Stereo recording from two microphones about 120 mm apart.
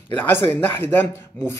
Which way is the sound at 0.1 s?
15° left (ahead or behind).